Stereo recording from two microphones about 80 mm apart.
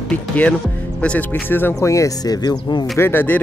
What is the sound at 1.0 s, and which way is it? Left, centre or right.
Speech, centre.